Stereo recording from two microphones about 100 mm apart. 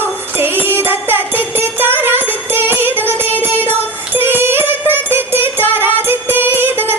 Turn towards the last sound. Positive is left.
turn(degrees=-20)  # may be behind; listen again after turning